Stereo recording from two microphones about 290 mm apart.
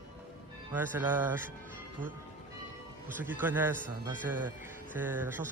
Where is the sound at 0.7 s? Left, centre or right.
Centre.